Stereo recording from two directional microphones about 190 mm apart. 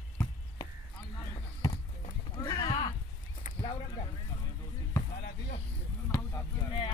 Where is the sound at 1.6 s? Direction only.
20° left (ahead or behind).